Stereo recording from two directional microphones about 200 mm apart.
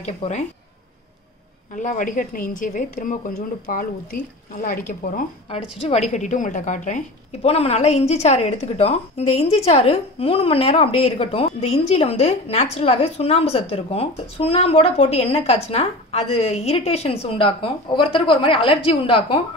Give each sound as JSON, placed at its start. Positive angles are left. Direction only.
{"t": 0.0, "sound": "a woman's voice", "side_deg": 35}
{"t": 1.8, "sound": "a woman's voice", "side_deg": 40}